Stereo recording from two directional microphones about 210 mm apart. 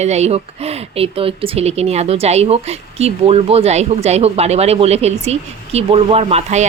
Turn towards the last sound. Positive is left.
turn(degrees=-30)  # may be behind; listen again after turning